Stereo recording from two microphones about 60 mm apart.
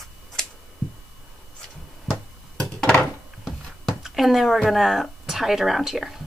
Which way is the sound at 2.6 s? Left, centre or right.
Centre.